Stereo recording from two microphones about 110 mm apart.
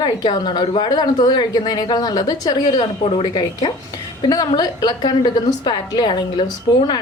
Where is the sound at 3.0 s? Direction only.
50° left (ahead or behind).